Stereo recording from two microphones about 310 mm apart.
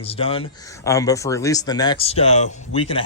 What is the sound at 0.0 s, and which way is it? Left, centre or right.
Speech, centre.